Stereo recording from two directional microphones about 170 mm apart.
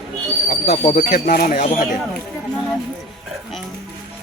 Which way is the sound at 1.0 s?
55° left (ahead or behind).